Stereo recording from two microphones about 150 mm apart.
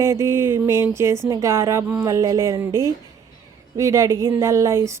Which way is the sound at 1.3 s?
20° right (ahead or behind).